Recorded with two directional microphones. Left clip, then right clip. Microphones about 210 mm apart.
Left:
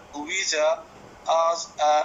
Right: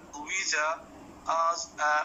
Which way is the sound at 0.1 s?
20° left (ahead or behind).